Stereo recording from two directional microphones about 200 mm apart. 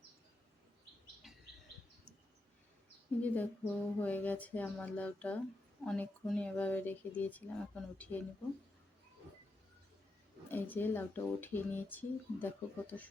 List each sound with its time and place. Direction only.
1.2 s bird: centre (ahead or behind)
3.2 s speech: 10° left (ahead or behind)
10.5 s speech: 10° left (ahead or behind)